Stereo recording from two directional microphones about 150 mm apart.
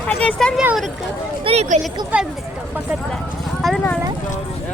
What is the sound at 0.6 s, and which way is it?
Speech, 5° right (ahead or behind).